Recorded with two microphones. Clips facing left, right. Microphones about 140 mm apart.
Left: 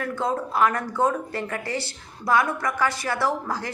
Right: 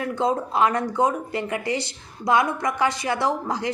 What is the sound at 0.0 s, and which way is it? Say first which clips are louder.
A woman's voice: right 3 dB; 20° right (ahead or behind).